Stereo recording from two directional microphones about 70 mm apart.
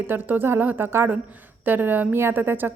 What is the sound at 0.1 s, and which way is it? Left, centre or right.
A woman's voice, right.